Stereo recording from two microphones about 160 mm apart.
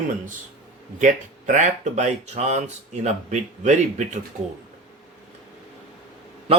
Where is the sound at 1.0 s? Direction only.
50° right (ahead or behind).